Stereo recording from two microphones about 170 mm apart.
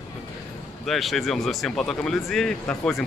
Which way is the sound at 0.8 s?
Centre (ahead or behind).